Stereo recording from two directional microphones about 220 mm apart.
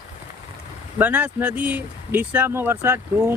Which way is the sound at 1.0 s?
10° right (ahead or behind).